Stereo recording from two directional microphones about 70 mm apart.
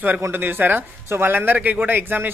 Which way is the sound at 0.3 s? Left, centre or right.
Right.